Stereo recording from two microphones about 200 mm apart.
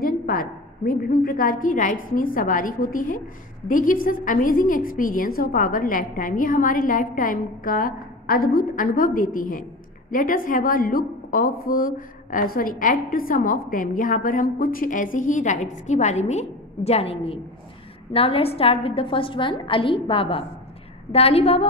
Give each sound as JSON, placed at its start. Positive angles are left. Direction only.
{"t": 0.0, "sound": "a woman's voice", "side_deg": 45}